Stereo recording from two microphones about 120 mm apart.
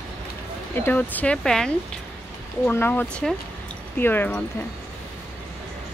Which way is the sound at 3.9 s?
15° left (ahead or behind).